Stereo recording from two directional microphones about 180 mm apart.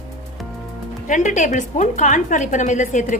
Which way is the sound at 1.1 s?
45° left (ahead or behind).